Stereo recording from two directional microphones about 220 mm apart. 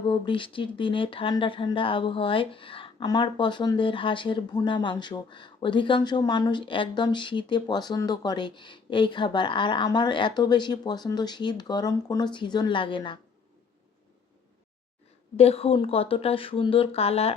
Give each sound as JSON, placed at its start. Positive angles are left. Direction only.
{"t": 0.0, "sound": "speech", "side_deg": 20}
{"t": 15.4, "sound": "speech", "side_deg": 25}